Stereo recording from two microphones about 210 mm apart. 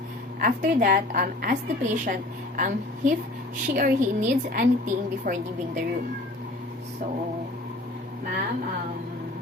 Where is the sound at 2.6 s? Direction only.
40° right (ahead or behind).